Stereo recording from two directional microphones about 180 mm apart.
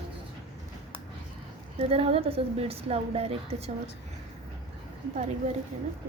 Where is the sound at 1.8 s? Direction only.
35° right (ahead or behind).